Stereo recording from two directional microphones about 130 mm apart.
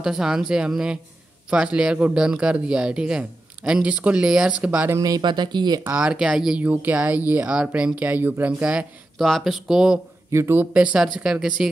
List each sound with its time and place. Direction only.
0.0 s speech: 5° right (ahead or behind)
4.9 s speech: 30° right (ahead or behind)
5.9 s speech: 10° right (ahead or behind)
10.3 s speech: 20° right (ahead or behind)